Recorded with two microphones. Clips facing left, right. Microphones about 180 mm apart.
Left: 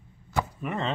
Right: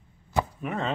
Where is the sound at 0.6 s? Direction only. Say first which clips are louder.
Even; centre (ahead or behind).